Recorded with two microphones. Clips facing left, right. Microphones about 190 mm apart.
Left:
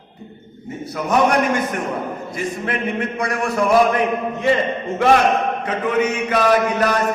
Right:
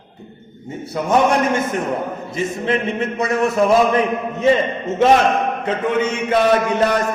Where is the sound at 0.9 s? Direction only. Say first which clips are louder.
Right 1 dB; 25° right (ahead or behind).